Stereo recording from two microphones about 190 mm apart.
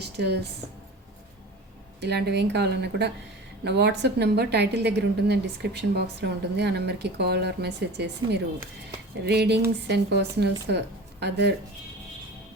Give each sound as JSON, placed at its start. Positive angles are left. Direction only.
{"t": 0.0, "sound": "speech", "side_deg": -60}
{"t": 2.0, "sound": "a woman's voice", "side_deg": -60}